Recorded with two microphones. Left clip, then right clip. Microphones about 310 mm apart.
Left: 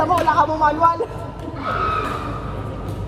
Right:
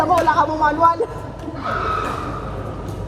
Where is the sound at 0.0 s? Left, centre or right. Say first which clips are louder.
Right 1 dB; left.